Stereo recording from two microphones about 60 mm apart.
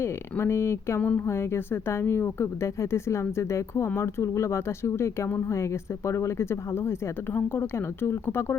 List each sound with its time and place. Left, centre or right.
0.0 s speech: left
3.8 s a woman's voice: left